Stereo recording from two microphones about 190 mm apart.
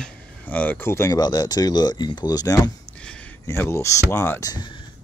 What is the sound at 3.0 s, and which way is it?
Speech, 5° left (ahead or behind).